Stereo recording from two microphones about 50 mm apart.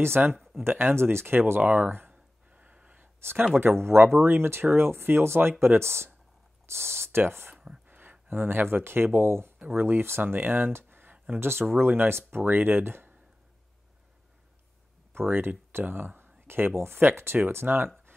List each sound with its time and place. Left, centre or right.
0.4 s speech: centre
0.7 s speech: right
2.0 s a sound: right
3.0 s a sound: right
3.5 s speech: right
7.5 s a sound: centre
7.9 s speech: right
9.8 s speech: right
11.7 s speech: right
15.1 s speech: right